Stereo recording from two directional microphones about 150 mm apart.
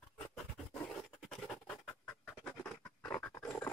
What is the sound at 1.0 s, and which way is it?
Scratch, centre (ahead or behind).